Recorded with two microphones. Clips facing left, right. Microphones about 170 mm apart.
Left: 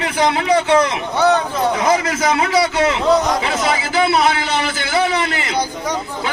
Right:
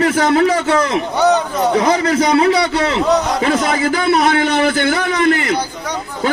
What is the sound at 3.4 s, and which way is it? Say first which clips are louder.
A man's voice: right 4 dB; 45° right (ahead or behind).